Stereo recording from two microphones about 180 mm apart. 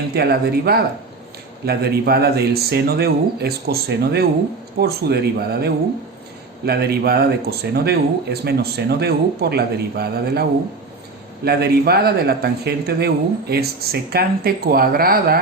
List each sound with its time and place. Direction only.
0.1 s speech: 60° right (ahead or behind)
11.4 s speech: 60° right (ahead or behind)